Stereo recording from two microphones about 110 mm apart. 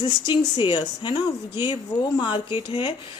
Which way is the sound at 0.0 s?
40° left (ahead or behind).